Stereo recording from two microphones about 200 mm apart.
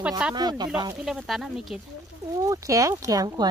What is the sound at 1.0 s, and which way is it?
Speech, centre (ahead or behind).